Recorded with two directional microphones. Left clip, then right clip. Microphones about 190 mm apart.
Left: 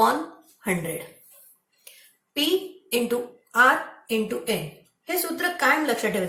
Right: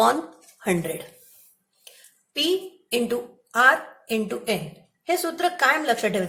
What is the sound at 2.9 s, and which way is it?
A woman's voice, 50° right (ahead or behind).